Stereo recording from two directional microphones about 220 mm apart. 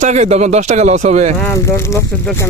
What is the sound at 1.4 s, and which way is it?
Speech, 10° left (ahead or behind).